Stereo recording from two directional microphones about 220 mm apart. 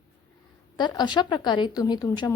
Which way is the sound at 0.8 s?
20° left (ahead or behind).